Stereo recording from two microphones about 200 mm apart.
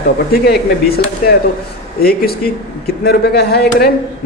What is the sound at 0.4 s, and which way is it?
Speech, 50° left (ahead or behind).